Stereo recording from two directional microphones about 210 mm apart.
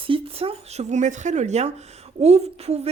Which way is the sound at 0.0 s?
25° right (ahead or behind).